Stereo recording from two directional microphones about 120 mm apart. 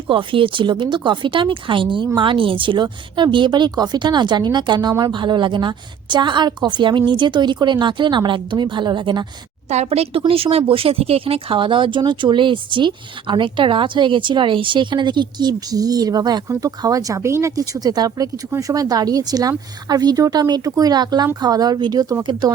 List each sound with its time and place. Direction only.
0.1 s speech: 45° right (ahead or behind)
9.6 s speech: 65° right (ahead or behind); by 22.5 s 40° right (ahead or behind)